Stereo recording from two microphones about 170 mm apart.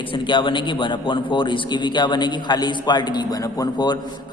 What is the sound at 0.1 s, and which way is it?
A man's voice, 30° left (ahead or behind).